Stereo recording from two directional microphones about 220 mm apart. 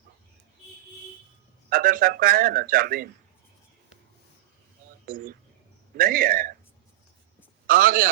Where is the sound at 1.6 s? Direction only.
40° right (ahead or behind).